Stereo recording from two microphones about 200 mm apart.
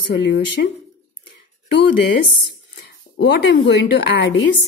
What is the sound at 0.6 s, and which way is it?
Speech, 50° left (ahead or behind).